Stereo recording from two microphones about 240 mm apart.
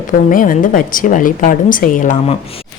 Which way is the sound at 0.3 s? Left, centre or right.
Left.